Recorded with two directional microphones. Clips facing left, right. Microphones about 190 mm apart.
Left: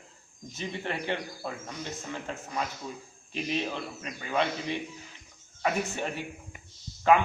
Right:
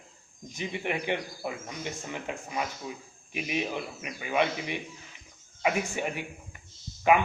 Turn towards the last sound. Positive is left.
turn(degrees=-15)  # may be behind; listen again after turning